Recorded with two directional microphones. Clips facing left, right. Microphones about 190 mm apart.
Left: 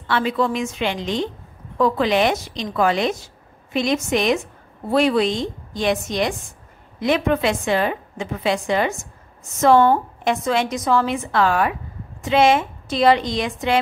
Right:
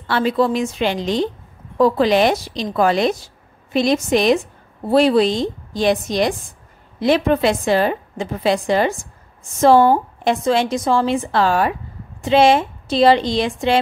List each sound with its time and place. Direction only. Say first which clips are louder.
0.0 s a woman's voice: right 3 dB; 35° right (ahead or behind)